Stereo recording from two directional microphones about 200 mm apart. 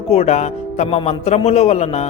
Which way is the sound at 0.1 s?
30° left (ahead or behind).